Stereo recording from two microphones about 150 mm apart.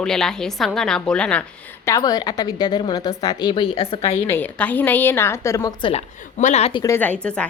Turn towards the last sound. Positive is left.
turn(degrees=5)  # may be behind; listen again after turning